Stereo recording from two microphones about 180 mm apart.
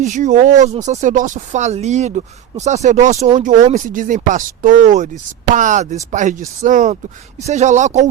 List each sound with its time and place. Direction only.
0.0 s speech: 45° right (ahead or behind)